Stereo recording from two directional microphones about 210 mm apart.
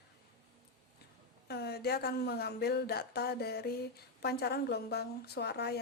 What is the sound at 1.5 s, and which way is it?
A woman's voice, 50° left (ahead or behind).